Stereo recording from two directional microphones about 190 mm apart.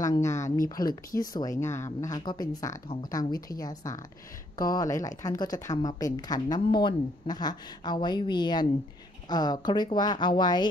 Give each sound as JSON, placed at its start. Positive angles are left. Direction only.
{"t": 0.0, "sound": "speech", "side_deg": 15}